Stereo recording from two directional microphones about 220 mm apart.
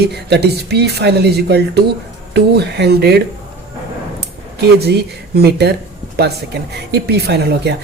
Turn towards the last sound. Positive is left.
turn(degrees=-50)  # may be behind; listen again after turning